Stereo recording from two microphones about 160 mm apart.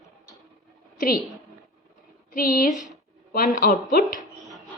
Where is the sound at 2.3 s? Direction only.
60° left (ahead or behind).